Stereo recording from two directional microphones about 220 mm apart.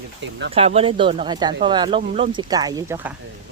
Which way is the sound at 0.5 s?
25° right (ahead or behind).